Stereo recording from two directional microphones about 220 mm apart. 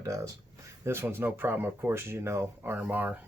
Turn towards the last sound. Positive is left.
turn(degrees=-10)  # may be behind; listen again after turning